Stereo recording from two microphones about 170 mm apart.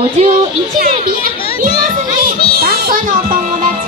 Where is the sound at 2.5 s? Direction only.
65° right (ahead or behind).